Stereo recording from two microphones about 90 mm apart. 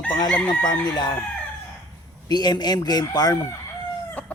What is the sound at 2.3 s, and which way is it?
Speech, 50° left (ahead or behind).